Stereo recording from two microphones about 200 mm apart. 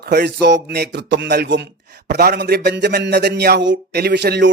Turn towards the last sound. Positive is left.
turn(degrees=-60)  # may be behind; listen again after turning